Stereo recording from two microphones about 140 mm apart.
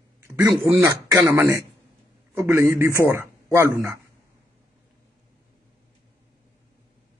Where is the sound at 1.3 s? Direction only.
20° right (ahead or behind).